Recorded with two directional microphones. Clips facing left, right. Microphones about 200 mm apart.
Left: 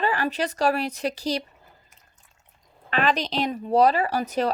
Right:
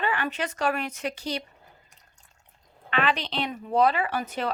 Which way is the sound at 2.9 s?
40° left (ahead or behind).